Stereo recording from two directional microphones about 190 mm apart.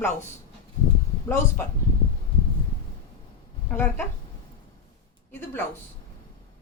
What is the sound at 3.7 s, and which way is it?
Speech, 10° left (ahead or behind).